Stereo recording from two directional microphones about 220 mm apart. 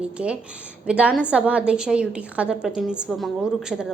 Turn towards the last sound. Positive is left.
turn(degrees=-5)  # may be behind; listen again after turning